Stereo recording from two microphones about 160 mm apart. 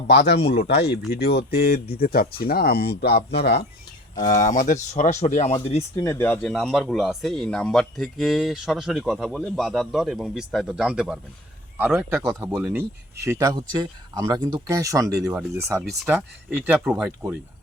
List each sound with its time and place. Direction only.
0.1 s speech: 90° left
0.4 s speech: 80° left
1.5 s speech: 75° left (ahead or behind); by 3.6 s 90° left
4.3 s speech: 55° left (ahead or behind); by 5.8 s 40° left (ahead or behind)
6.0 s speech: 15° left (ahead or behind); by 11.2 s 5° right (ahead or behind)
12.5 s speech: 15° right (ahead or behind)